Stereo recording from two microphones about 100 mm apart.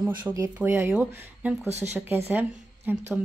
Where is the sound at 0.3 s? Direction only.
15° right (ahead or behind).